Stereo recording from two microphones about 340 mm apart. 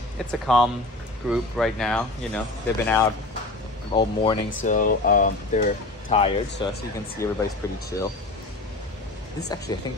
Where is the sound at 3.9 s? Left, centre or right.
Centre.